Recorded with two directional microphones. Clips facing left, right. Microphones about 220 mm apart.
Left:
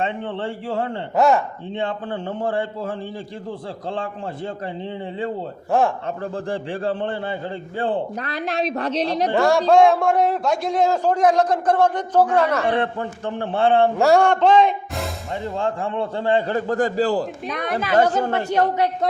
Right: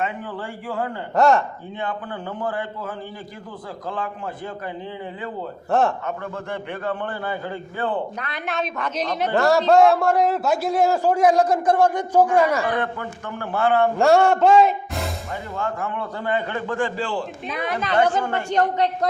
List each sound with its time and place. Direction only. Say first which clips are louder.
0.0 s a man's voice: left 3 dB; 25° left (ahead or behind)
1.1 s speech: even; centre (ahead or behind)
1.7 s a man's voice: left 4 dB; 25° left (ahead or behind)
6.1 s a man's voice: left 3 dB; 30° left (ahead or behind)
9.3 s a man's voice: even; centre (ahead or behind)
12.6 s a man's voice: left 3 dB; 30° left (ahead or behind)
14.0 s speech: right 2 dB; centre (ahead or behind)
15.5 s a man's voice: left 3 dB; 30° left (ahead or behind)
17.5 s speech: even; centre (ahead or behind)
17.9 s a man's voice: left 2 dB; 40° left (ahead or behind)
18.4 s a woman's voice: right 1 dB; 10° left (ahead or behind)